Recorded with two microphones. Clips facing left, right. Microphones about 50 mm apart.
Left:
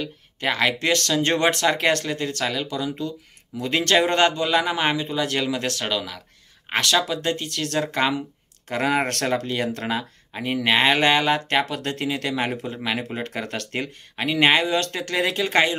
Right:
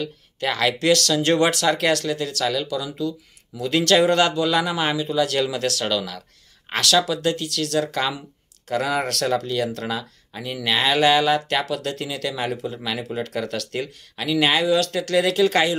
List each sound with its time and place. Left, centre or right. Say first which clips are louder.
0.0 s speech: right 1 dB; left